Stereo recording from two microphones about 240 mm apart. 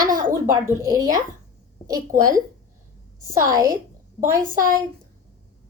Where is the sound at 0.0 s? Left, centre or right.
Right.